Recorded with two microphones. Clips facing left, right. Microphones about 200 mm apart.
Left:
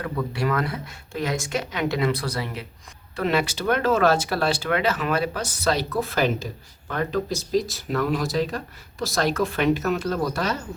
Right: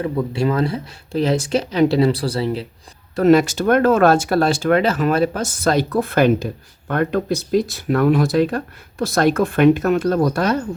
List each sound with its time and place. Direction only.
0.0 s speech: 25° right (ahead or behind)
3.2 s speech: 45° right (ahead or behind)